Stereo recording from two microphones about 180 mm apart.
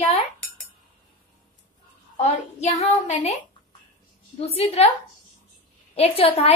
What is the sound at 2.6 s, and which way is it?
Speech, 35° left (ahead or behind).